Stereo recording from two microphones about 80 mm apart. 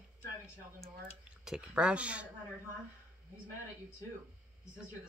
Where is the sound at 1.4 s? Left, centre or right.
Centre.